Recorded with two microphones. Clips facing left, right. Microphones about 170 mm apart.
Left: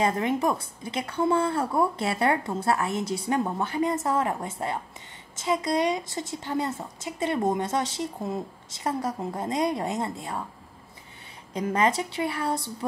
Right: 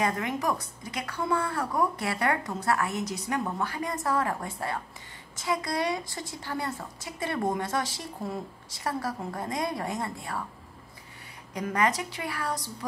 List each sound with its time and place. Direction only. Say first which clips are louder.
0.0 s a woman's voice: left 4 dB; 25° left (ahead or behind)
11.5 s a woman's voice: left 3 dB; 25° left (ahead or behind)